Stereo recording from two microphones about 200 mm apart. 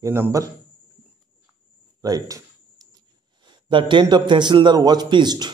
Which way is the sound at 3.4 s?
25° right (ahead or behind).